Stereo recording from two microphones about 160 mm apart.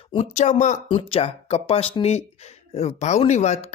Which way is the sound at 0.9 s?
40° left (ahead or behind).